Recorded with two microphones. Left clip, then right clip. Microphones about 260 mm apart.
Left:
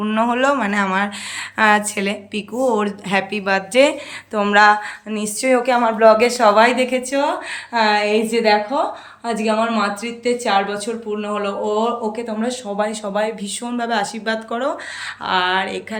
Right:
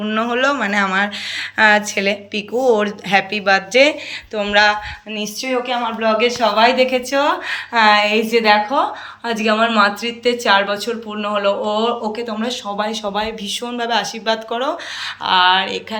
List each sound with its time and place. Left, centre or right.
0.0 s speech: centre